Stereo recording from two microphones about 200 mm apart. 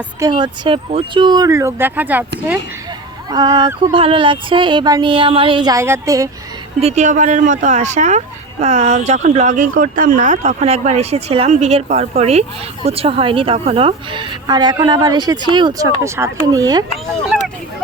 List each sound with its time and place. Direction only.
0.2 s speech: 20° right (ahead or behind)
3.2 s speech: 20° right (ahead or behind)
6.7 s speech: 35° right (ahead or behind)